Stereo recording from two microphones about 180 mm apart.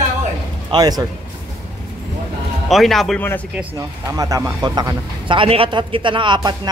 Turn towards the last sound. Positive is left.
turn(degrees=-25)  # may be behind; listen again after turning